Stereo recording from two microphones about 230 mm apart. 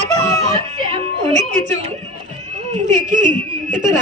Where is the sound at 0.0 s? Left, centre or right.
Right.